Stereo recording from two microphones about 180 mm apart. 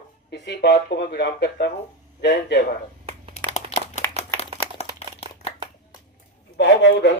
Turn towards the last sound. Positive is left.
turn(degrees=75)  # may be behind; listen again after turning